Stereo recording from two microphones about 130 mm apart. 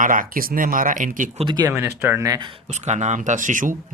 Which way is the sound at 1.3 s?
35° right (ahead or behind).